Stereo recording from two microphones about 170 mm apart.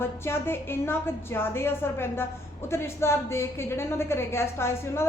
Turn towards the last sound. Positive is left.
turn(degrees=15)  # may be behind; listen again after turning